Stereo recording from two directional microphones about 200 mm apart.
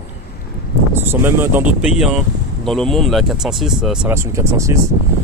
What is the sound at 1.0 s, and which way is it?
Speech, 10° right (ahead or behind).